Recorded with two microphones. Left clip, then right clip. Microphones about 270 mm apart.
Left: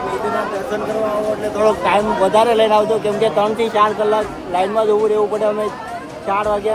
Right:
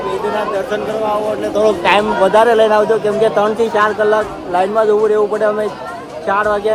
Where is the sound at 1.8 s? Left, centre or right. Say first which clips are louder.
Right 3 dB; right.